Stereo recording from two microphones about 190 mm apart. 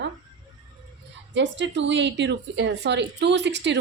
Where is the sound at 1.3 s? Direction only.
70° right (ahead or behind).